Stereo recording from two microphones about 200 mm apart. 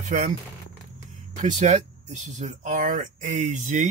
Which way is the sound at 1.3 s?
40° right (ahead or behind).